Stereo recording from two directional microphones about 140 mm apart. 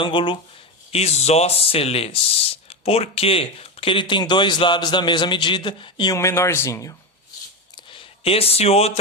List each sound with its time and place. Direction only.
0.0 s speech: 35° left (ahead or behind)
0.9 s speech: 45° left (ahead or behind)
6.1 s speech: 20° left (ahead or behind)
7.8 s a sound: 35° left (ahead or behind)